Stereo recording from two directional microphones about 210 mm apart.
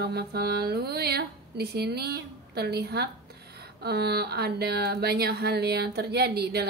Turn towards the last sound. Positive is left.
turn(degrees=-50)  # may be behind; listen again after turning